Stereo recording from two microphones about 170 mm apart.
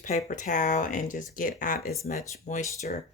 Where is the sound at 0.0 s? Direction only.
45° left (ahead or behind).